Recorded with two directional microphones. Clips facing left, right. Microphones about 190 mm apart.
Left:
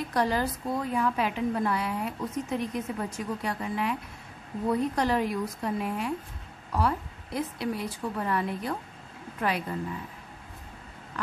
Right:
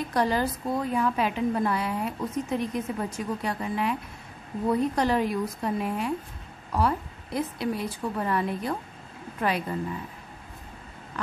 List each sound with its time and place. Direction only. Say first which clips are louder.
0.1 s a woman's voice: right 2 dB; 25° right (ahead or behind)